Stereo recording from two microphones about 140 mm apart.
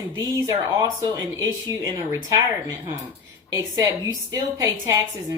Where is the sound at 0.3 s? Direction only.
25° right (ahead or behind).